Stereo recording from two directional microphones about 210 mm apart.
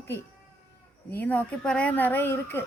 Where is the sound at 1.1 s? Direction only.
5° left (ahead or behind).